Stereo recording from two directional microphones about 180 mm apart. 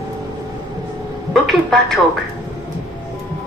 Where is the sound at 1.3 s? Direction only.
Centre (ahead or behind).